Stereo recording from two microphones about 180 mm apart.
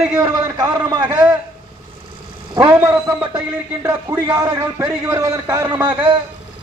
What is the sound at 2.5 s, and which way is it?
A man's voice, 20° right (ahead or behind).